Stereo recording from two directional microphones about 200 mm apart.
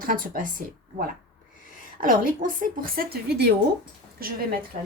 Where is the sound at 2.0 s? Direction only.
45° right (ahead or behind).